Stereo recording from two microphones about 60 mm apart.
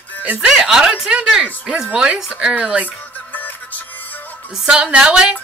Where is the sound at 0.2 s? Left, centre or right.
Right.